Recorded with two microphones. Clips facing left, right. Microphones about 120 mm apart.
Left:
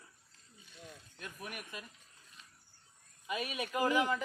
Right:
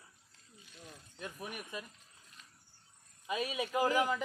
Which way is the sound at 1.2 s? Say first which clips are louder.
Right 3 dB; 25° right (ahead or behind).